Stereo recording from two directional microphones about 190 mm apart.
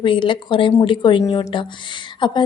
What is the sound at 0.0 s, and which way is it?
A woman's voice, 25° left (ahead or behind).